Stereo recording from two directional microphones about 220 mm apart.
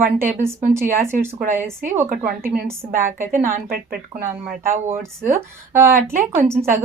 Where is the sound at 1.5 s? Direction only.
10° right (ahead or behind).